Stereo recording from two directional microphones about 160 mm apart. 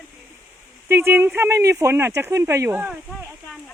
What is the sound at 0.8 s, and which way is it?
Speech, 15° right (ahead or behind).